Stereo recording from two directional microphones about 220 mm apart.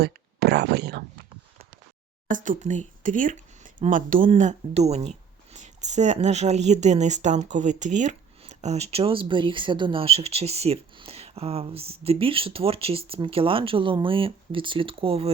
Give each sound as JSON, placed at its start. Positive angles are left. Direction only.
{"t": 0.0, "sound": "speech", "side_deg": -45}
{"t": 2.3, "sound": "speech", "side_deg": -35}